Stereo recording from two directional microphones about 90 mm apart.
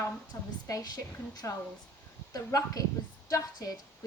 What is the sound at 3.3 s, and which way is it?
Speech, 40° left (ahead or behind).